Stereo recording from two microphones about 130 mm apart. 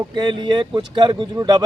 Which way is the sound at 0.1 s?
35° right (ahead or behind).